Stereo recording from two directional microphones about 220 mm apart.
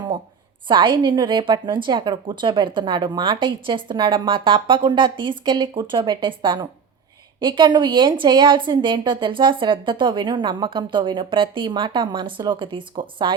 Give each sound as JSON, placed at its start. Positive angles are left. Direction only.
{"t": 0.7, "sound": "a woman's voice", "side_deg": -20}